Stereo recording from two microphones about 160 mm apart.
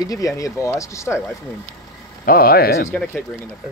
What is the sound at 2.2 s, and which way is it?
Speech, 70° left (ahead or behind).